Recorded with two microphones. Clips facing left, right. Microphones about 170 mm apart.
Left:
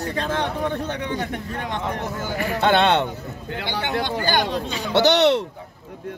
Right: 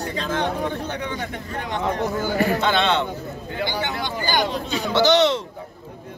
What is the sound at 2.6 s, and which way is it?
Speech, 60° left (ahead or behind).